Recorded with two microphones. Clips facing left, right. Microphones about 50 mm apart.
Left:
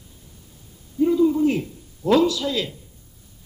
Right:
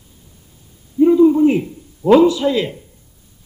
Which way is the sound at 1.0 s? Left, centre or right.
Right.